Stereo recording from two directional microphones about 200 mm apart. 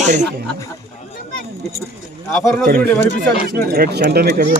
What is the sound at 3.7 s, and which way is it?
Speech, 50° right (ahead or behind).